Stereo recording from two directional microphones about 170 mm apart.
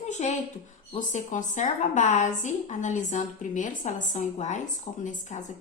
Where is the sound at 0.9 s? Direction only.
50° left (ahead or behind).